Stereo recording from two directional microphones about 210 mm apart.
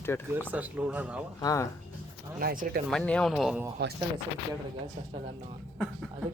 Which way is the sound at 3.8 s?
50° right (ahead or behind).